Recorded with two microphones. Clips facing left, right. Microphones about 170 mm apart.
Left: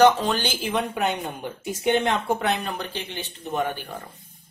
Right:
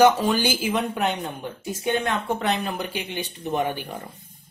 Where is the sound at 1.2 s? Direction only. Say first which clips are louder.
Even; 15° left (ahead or behind).